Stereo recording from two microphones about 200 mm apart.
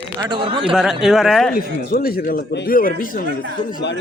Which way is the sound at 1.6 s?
50° left (ahead or behind).